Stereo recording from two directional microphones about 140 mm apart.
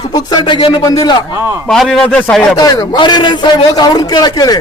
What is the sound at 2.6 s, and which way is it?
A man's voice, 30° left (ahead or behind).